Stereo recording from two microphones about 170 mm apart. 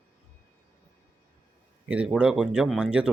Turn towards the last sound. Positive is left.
turn(degrees=-5)  # may be behind; listen again after turning